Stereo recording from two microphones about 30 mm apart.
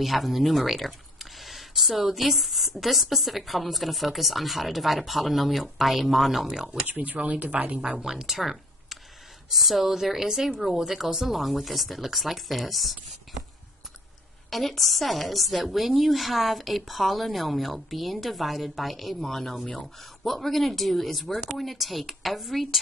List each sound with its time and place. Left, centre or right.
0.0 s speech: centre
6.4 s speech: right
6.9 s speech: right
7.3 s a woman's voice: right
7.7 s speech: right
8.0 s speech: centre
8.3 s a sound: centre
9.5 s a woman's voice: centre
14.5 s speech: centre
19.1 s speech: centre